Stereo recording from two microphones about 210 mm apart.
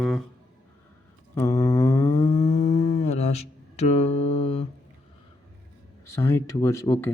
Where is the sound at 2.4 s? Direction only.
30° left (ahead or behind).